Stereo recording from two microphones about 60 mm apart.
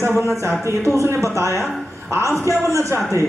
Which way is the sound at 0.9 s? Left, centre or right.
Right.